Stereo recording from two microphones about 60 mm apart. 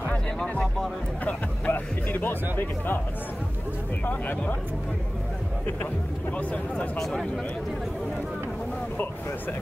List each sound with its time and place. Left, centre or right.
0.4 s music: centre
1.2 s speech: left
4.0 s speech: left
6.3 s speech: left